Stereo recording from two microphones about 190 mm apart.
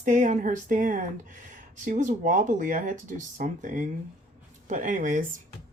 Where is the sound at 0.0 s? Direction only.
40° right (ahead or behind).